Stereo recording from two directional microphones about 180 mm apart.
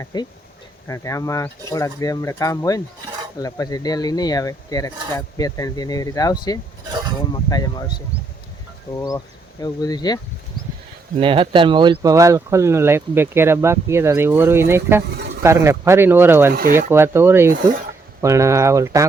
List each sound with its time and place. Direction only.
0.0 s speech: 20° left (ahead or behind)
11.2 s speech: 30° right (ahead or behind)